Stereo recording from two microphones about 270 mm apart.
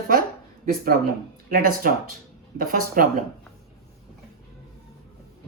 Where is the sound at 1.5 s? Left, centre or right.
Right.